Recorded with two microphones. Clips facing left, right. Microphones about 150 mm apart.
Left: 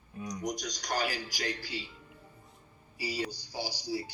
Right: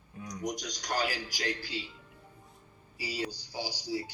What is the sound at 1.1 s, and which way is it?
Speech, 10° right (ahead or behind).